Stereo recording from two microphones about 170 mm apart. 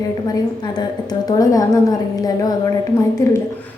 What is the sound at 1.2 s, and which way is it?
Speech, 20° left (ahead or behind).